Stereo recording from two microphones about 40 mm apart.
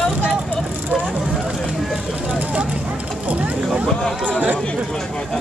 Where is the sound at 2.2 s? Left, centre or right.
Right.